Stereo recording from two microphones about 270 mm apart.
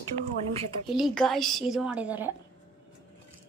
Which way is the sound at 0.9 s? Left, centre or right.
Centre.